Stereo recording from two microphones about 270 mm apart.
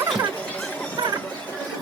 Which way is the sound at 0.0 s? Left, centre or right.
Centre.